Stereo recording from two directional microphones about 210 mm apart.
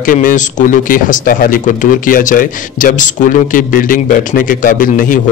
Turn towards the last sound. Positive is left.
turn(degrees=40)  # may be behind; listen again after turning